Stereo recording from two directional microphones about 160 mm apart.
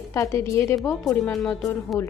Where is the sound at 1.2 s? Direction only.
Centre (ahead or behind).